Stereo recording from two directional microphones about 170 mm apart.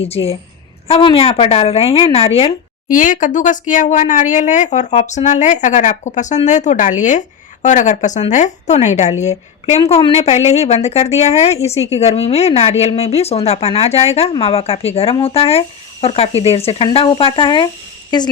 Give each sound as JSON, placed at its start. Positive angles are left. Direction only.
{"t": 0.0, "sound": "a woman's voice", "side_deg": 35}
{"t": 2.9, "sound": "a woman's voice", "side_deg": 50}